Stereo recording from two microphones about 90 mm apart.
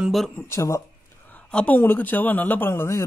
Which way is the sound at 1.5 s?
10° left (ahead or behind).